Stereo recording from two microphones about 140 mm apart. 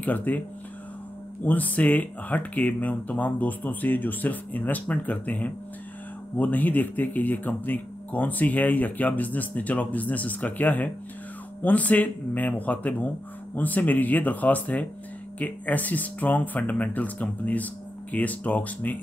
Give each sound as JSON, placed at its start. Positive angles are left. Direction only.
{"t": 0.0, "sound": "speech", "side_deg": 10}
{"t": 1.4, "sound": "speech", "side_deg": 10}